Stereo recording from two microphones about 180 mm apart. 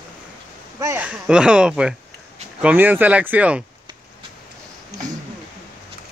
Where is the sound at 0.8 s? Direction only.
10° right (ahead or behind).